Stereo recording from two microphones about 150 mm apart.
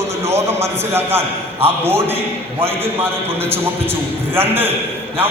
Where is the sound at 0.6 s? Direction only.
15° right (ahead or behind).